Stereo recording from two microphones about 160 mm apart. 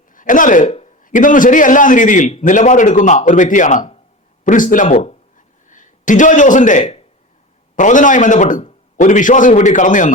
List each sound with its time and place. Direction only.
0.1 s speech: 55° left (ahead or behind); by 0.9 s 40° left (ahead or behind)
1.0 s a man's voice: 55° left (ahead or behind)